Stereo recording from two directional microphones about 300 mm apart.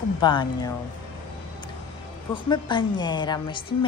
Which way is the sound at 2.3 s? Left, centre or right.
Centre.